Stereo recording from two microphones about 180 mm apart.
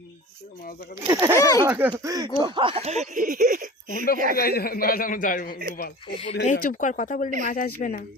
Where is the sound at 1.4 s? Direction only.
20° left (ahead or behind).